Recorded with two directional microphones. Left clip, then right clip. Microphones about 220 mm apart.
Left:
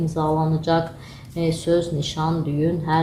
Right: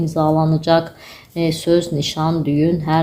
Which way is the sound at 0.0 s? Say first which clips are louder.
Right 5 dB; 45° right (ahead or behind).